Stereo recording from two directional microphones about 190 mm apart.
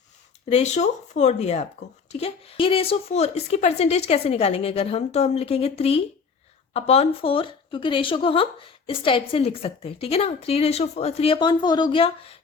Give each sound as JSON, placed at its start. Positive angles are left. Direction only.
{"t": 0.5, "sound": "speech", "side_deg": 35}